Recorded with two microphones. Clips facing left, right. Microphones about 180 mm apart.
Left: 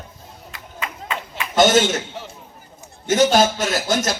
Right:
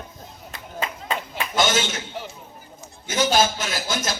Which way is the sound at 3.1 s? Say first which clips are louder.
Left 5 dB; 45° left (ahead or behind).